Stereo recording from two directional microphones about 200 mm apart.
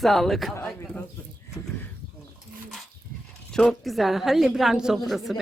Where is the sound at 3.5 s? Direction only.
Centre (ahead or behind).